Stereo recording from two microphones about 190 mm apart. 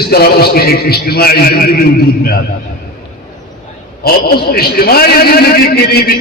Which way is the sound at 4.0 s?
55° left (ahead or behind).